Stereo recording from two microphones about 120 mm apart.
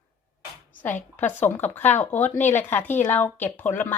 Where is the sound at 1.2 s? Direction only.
15° left (ahead or behind).